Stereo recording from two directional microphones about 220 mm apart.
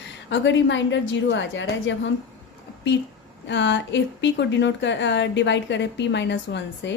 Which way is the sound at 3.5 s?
55° left (ahead or behind).